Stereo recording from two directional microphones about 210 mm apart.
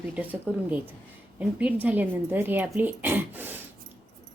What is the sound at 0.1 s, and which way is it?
Speech, 5° right (ahead or behind).